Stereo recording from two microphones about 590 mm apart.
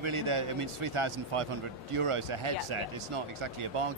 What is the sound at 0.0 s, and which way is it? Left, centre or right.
Speech, right.